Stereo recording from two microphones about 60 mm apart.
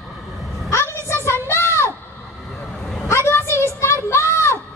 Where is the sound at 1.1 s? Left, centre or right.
Left.